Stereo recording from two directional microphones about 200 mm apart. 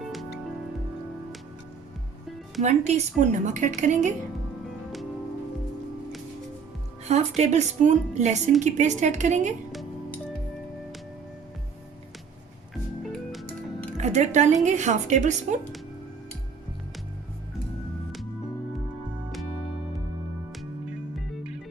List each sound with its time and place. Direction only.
0.0 s music: centre (ahead or behind)
2.6 s speech: 35° right (ahead or behind)
7.0 s speech: 35° right (ahead or behind)
14.0 s speech: 35° right (ahead or behind)